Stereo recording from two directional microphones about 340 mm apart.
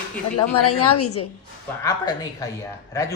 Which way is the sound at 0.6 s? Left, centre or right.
Left.